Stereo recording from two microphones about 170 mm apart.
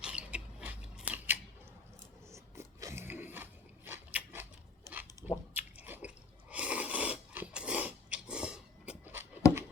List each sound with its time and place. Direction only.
0.0 s scissors: 5° right (ahead or behind)
2.3 s a sound: 15° right (ahead or behind)
5.5 s chewing: 10° right (ahead or behind)